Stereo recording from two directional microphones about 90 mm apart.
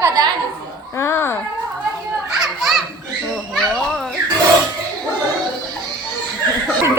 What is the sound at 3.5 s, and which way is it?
Speech, 5° left (ahead or behind).